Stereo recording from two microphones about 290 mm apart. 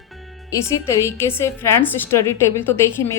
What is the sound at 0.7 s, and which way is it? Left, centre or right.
A woman's voice, centre.